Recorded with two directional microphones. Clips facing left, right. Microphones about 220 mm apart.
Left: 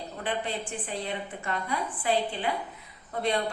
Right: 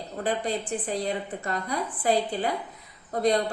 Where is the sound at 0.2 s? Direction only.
40° right (ahead or behind).